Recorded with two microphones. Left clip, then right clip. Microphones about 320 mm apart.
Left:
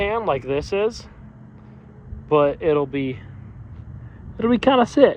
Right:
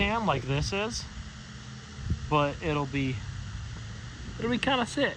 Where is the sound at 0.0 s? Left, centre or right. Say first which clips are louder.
Left 6 dB; centre.